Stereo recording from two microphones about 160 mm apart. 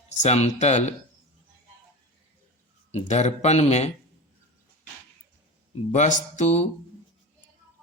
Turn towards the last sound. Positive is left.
turn(degrees=45)  # may be behind; listen again after turning